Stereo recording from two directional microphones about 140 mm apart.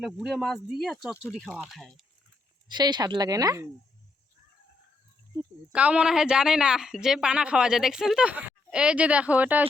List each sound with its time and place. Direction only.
0.0 s speech: centre (ahead or behind)
2.6 s speech: 30° right (ahead or behind)
5.3 s a sound: 25° right (ahead or behind)
5.7 s a woman's voice: 10° right (ahead or behind)